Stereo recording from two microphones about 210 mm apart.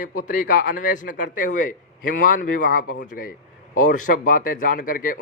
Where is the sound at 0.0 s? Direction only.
40° left (ahead or behind).